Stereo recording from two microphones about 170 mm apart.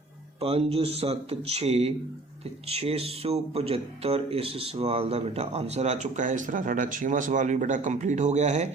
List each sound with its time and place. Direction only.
0.3 s speech: 35° right (ahead or behind)